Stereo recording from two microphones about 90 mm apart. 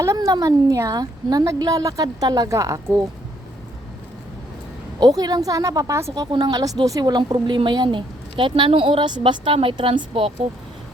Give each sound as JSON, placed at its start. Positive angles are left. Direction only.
{"t": 0.0, "sound": "a woman's voice", "side_deg": -35}
{"t": 4.9, "sound": "a woman's voice", "side_deg": -50}
{"t": 6.3, "sound": "a woman's voice", "side_deg": -50}